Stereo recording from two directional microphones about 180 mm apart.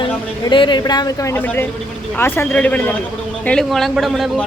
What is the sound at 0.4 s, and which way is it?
A man's voice, 25° left (ahead or behind).